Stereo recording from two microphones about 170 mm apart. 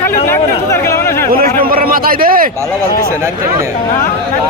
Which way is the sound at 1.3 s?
60° right (ahead or behind).